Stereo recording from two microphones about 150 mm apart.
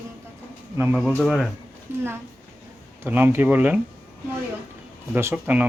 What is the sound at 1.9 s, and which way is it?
Speech, 15° right (ahead or behind).